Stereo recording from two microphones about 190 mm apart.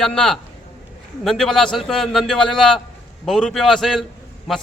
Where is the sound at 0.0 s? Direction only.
5° left (ahead or behind).